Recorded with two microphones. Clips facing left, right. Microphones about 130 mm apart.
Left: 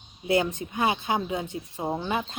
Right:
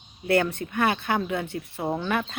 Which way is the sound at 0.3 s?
15° left (ahead or behind).